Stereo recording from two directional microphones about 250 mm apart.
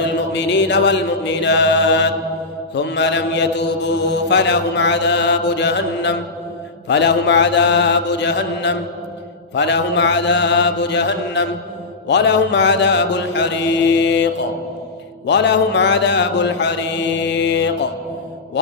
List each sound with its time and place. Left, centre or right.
0.3 s mantra: left